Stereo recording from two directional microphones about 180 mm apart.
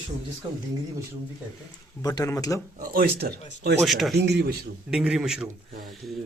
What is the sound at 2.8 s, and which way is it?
Speech, 55° right (ahead or behind).